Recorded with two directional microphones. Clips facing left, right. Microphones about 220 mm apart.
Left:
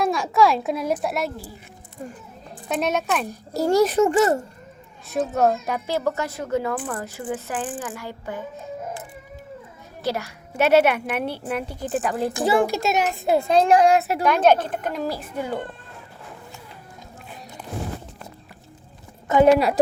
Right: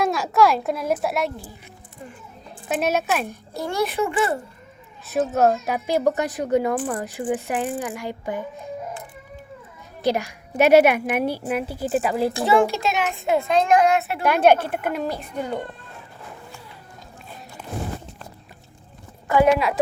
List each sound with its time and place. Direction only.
0.0 s a child's voice: centre (ahead or behind)
2.6 s a child's voice: 5° right (ahead or behind)
3.2 s a child's voice: 40° left (ahead or behind)
5.0 s a child's voice: centre (ahead or behind)
5.8 s a woman's voice: 15° right (ahead or behind)
10.0 s a woman's voice: 15° right (ahead or behind)
12.8 s a child's voice: 40° left (ahead or behind)
14.3 s a child's voice: 10° right (ahead or behind)
19.5 s a child's voice: 35° left (ahead or behind)